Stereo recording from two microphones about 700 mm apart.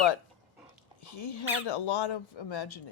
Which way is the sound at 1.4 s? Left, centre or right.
Left.